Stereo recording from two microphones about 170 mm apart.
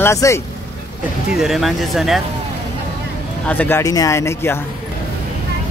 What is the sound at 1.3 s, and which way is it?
Speech, centre (ahead or behind).